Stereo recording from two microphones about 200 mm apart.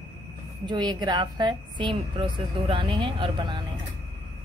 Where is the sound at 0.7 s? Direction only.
20° right (ahead or behind).